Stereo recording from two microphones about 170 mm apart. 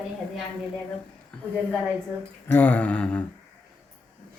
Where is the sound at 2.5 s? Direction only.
10° left (ahead or behind).